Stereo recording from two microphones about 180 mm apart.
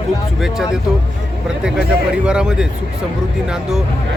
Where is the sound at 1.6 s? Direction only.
5° right (ahead or behind).